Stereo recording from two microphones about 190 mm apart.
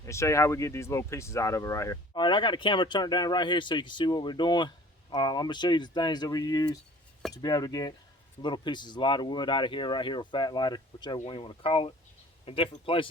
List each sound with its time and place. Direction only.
0.0 s speech: 15° left (ahead or behind)